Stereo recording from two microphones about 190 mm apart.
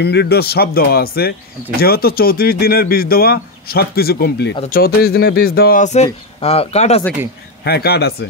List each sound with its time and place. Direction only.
0.0 s speech: 60° left (ahead or behind); by 7.0 s 35° left (ahead or behind)
7.6 s speech: 55° left (ahead or behind)